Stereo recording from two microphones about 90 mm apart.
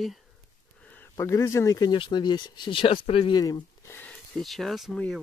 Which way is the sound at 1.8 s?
60° left (ahead or behind).